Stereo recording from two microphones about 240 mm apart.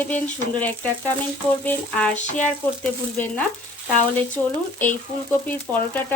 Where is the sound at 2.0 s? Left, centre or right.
Centre.